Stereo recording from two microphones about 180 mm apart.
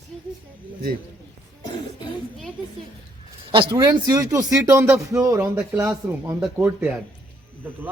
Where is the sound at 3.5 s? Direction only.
25° right (ahead or behind); by 7.0 s 10° right (ahead or behind).